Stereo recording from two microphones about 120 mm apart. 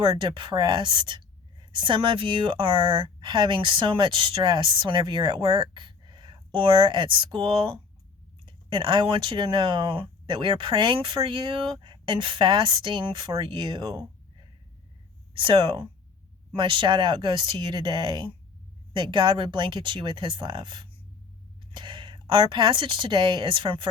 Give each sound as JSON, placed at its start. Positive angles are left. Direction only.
{"t": 0.0, "sound": "speech", "side_deg": -40}
{"t": 15.4, "sound": "speech", "side_deg": -45}